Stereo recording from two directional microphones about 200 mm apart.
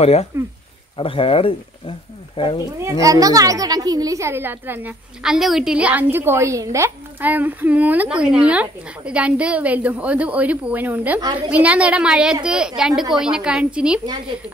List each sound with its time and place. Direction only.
0.0 s speech: 30° left (ahead or behind)
2.8 s a child's voice: 15° right (ahead or behind)